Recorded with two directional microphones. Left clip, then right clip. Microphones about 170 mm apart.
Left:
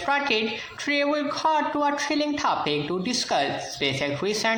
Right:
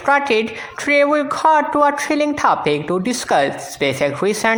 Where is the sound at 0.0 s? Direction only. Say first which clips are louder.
Right 8 dB; 50° right (ahead or behind).